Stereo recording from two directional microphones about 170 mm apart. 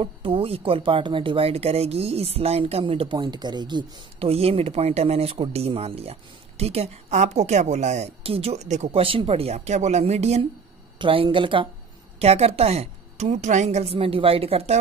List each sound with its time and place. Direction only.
0.0 s speech: 35° right (ahead or behind)
11.0 s a woman's voice: 30° right (ahead or behind)